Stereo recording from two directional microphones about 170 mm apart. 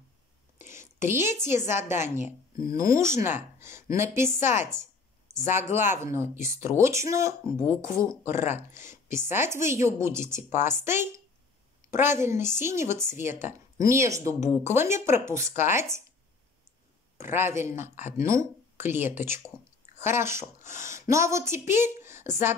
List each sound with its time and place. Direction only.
0.6 s a woman's voice: 15° right (ahead or behind)
17.2 s speech: 15° right (ahead or behind)